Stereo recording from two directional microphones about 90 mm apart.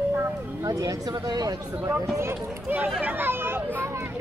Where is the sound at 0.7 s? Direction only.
40° right (ahead or behind).